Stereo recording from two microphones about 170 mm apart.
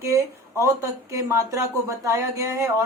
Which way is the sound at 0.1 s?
15° right (ahead or behind).